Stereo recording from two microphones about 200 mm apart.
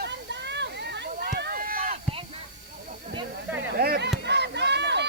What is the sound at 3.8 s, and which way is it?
Chop, 55° right (ahead or behind).